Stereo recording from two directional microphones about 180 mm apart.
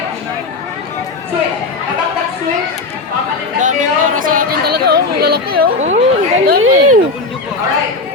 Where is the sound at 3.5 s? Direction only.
45° right (ahead or behind).